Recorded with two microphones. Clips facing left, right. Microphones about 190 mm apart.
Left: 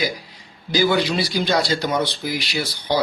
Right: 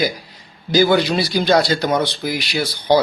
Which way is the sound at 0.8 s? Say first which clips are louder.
Right 4 dB; 50° right (ahead or behind).